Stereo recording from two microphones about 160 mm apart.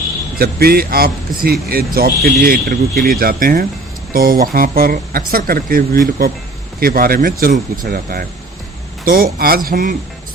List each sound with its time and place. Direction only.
0.3 s speech: 75° right (ahead or behind)
2.4 s speech: 80° right
3.1 s speech: 65° right (ahead or behind)
9.6 s speech: 55° right (ahead or behind)